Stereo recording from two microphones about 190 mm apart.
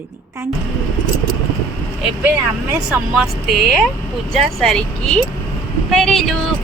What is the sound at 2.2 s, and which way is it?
A woman's voice, 10° right (ahead or behind).